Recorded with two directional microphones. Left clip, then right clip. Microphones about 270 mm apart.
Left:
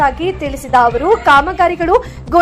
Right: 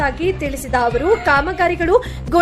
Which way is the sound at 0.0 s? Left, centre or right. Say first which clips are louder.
Left 4 dB; centre.